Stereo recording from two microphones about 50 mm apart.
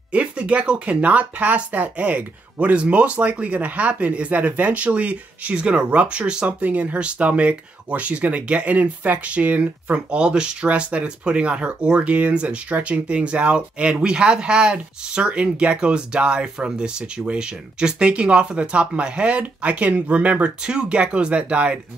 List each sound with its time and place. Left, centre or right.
0.1 s speech: right